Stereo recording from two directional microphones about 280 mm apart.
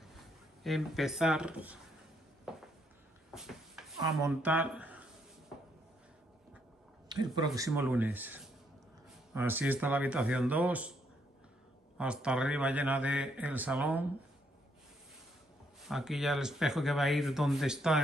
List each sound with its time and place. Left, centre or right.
0.7 s speech: centre
2.5 s a sound: centre
4.0 s speech: centre
7.1 s a sound: centre
7.5 s speech: centre
12.0 s speech: centre
15.8 s speech: centre